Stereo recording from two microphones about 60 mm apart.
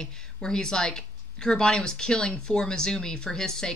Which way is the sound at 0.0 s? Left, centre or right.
Centre.